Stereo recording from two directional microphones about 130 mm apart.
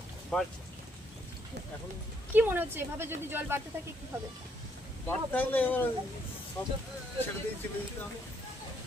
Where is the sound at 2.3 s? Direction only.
15° right (ahead or behind).